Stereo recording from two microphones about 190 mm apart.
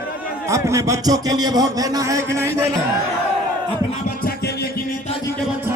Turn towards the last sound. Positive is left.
turn(degrees=55)  # may be behind; listen again after turning